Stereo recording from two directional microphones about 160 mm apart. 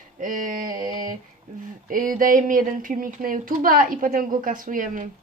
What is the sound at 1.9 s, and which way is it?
Speech, 60° right (ahead or behind).